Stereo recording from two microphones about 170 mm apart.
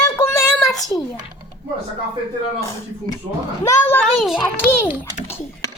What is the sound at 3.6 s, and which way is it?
Speech, 10° left (ahead or behind).